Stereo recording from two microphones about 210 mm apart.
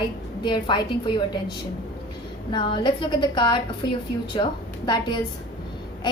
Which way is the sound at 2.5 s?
20° left (ahead or behind).